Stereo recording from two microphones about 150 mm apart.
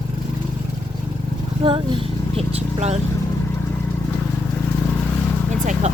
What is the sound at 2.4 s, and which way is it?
Speech, 45° right (ahead or behind).